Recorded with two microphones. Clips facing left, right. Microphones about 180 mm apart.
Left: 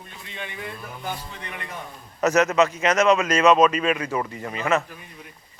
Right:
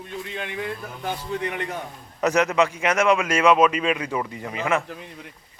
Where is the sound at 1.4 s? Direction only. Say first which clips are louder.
Right 8 dB; 80° right.